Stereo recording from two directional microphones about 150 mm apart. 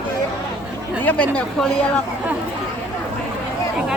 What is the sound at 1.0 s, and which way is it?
Speech, 10° left (ahead or behind).